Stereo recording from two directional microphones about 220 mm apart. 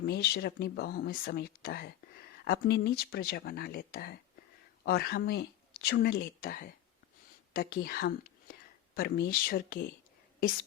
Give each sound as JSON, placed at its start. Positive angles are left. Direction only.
{"t": 0.0, "sound": "speech", "side_deg": 45}